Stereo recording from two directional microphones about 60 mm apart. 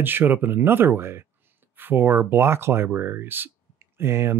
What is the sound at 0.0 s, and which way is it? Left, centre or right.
Speech, right.